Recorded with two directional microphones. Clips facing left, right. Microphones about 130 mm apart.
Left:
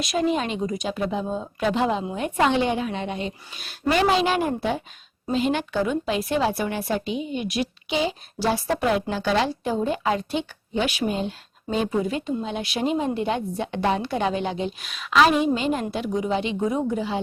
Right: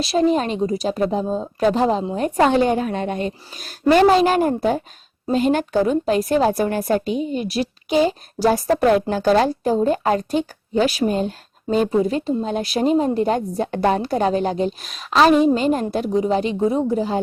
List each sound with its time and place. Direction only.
0.0 s a woman's voice: 35° right (ahead or behind)